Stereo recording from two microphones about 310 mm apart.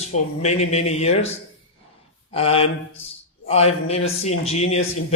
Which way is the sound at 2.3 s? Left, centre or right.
Centre.